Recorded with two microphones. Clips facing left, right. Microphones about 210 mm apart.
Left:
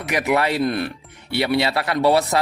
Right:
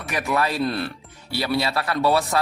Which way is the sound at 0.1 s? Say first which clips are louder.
Left 4 dB; 20° left (ahead or behind).